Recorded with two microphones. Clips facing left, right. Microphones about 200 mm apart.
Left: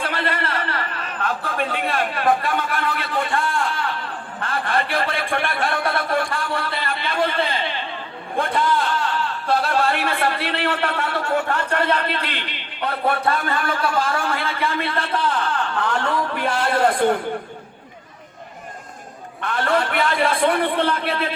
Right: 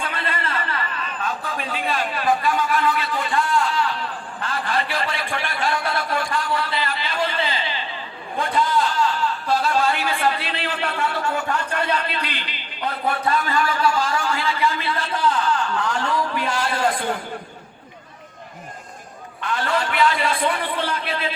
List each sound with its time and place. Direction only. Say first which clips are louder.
0.0 s a sound: left 3 dB; 70° left (ahead or behind)
8.4 s a man's voice: even; 55° left (ahead or behind)
19.4 s a man's voice: left 3 dB; 55° left (ahead or behind)